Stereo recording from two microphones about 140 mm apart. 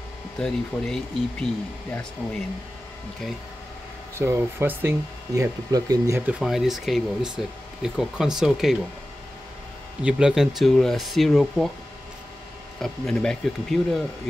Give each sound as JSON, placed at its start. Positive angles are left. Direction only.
{"t": 0.4, "sound": "speech", "side_deg": 5}
{"t": 4.1, "sound": "speech", "side_deg": -20}
{"t": 6.2, "sound": "speech", "side_deg": 0}
{"t": 10.0, "sound": "speech", "side_deg": -5}
{"t": 12.8, "sound": "speech", "side_deg": 5}